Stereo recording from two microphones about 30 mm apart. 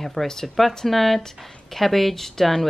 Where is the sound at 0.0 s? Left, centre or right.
Centre.